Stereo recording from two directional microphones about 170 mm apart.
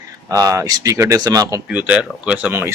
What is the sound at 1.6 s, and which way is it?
Speech, 10° right (ahead or behind).